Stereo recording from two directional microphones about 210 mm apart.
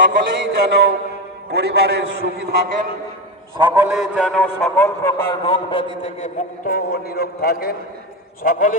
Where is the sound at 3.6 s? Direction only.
5° right (ahead or behind); by 5.8 s 20° left (ahead or behind).